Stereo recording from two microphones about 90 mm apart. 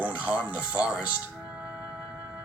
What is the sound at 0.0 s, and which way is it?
Speech, 15° right (ahead or behind).